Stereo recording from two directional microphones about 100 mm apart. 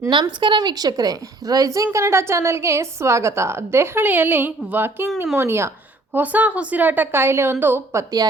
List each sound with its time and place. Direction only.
0.1 s a woman's voice: 50° right (ahead or behind); by 8.0 s 25° right (ahead or behind)